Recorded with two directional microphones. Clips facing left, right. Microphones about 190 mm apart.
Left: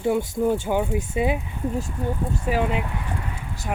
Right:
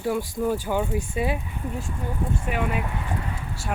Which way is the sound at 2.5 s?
20° left (ahead or behind).